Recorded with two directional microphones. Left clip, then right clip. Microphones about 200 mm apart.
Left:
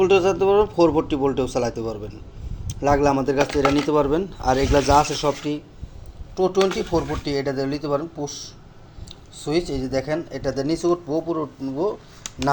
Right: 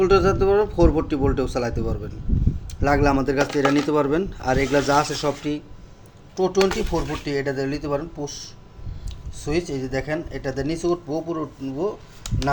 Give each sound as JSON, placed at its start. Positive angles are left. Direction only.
{"t": 0.0, "sound": "speech", "side_deg": 0}
{"t": 3.4, "sound": "speech", "side_deg": 15}
{"t": 3.8, "sound": "speech", "side_deg": 0}
{"t": 9.4, "sound": "speech", "side_deg": 10}